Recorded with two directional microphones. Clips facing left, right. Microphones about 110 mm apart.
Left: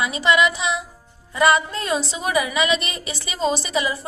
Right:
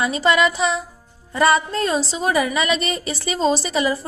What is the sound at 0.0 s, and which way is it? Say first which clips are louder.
A woman's voice: right 1 dB; 40° right (ahead or behind).